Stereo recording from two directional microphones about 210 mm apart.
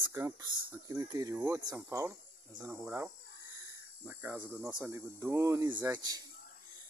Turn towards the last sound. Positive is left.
turn(degrees=-15)  # may be behind; listen again after turning